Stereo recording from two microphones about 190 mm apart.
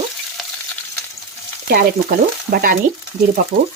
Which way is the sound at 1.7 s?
50° right (ahead or behind).